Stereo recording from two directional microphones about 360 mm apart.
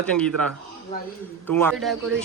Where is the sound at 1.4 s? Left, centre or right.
Centre.